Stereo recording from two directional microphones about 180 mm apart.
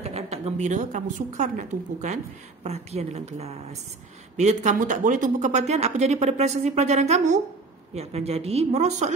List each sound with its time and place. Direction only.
0.1 s speech: 35° right (ahead or behind)